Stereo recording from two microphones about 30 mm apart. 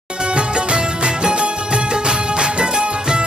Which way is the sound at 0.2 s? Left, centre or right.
Right.